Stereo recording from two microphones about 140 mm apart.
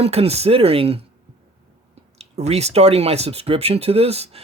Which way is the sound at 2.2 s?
50° right (ahead or behind).